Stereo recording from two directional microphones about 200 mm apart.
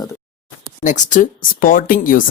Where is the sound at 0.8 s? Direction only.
40° left (ahead or behind).